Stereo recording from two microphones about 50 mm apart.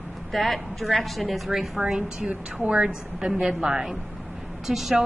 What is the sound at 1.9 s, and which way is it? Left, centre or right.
A woman's voice, right.